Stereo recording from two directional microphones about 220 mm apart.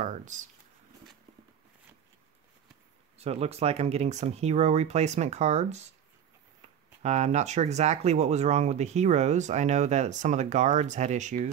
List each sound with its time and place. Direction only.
0.0 s speech: 35° right (ahead or behind)
3.2 s speech: 30° right (ahead or behind)